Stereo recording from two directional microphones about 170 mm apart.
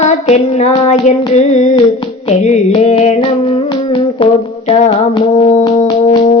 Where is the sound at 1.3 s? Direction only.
40° left (ahead or behind).